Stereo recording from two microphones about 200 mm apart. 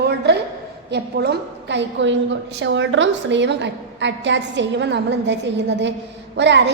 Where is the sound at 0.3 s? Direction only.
55° right (ahead or behind).